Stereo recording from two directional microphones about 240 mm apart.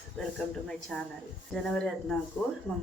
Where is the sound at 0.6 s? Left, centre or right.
Centre.